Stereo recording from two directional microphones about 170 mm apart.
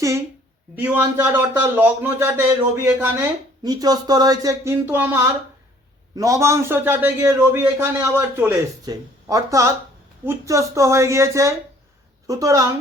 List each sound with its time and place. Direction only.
0.8 s a man's voice: 10° right (ahead or behind)
3.6 s a man's voice: 20° right (ahead or behind)